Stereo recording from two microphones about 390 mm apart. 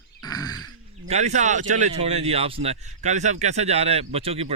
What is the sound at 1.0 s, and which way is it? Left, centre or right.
Speech, centre.